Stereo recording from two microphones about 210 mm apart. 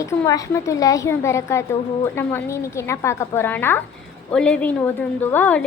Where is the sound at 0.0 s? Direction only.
15° left (ahead or behind).